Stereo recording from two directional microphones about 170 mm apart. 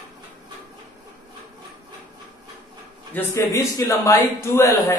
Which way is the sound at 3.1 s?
15° left (ahead or behind).